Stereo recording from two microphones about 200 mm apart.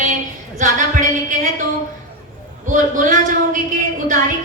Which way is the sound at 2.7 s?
40° right (ahead or behind).